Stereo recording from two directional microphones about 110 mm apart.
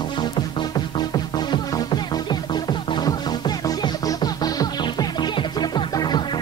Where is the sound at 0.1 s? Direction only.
40° left (ahead or behind).